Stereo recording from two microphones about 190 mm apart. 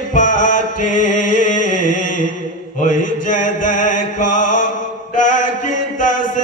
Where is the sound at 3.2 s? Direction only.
40° left (ahead or behind).